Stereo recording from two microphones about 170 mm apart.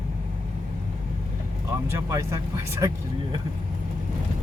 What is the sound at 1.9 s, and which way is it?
Speech, 15° right (ahead or behind).